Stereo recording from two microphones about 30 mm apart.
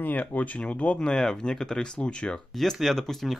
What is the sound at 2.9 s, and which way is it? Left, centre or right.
Speech, centre.